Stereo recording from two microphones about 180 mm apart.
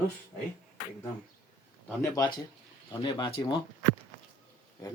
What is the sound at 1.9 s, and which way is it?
Speech, 15° left (ahead or behind).